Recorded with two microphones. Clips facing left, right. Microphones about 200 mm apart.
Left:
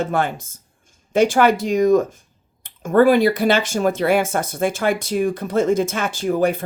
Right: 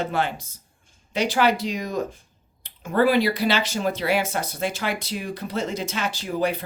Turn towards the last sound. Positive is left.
turn(degrees=50)  # may be behind; listen again after turning